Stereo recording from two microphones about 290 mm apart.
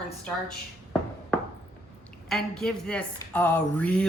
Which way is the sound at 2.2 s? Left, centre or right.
Centre.